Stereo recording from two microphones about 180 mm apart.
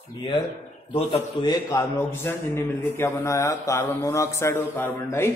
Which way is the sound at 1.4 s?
20° left (ahead or behind).